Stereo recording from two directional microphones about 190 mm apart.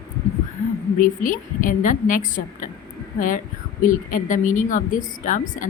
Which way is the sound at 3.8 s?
45° left (ahead or behind).